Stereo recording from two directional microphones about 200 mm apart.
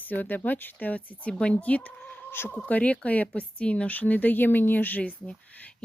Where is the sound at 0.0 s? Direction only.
10° left (ahead or behind).